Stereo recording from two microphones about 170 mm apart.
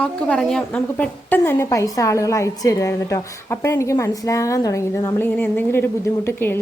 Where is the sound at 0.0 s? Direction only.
5° left (ahead or behind).